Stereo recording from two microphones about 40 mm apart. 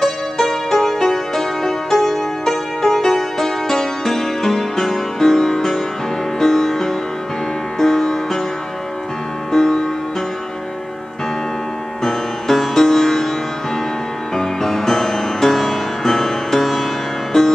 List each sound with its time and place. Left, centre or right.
0.0 s music: centre
9.5 s music: centre
12.0 s music: centre
14.3 s music: centre